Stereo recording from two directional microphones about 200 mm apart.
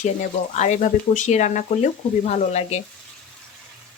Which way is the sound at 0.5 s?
35° left (ahead or behind).